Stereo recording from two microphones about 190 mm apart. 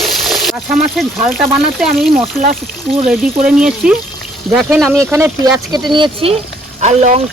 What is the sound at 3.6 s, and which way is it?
Speech, 5° right (ahead or behind).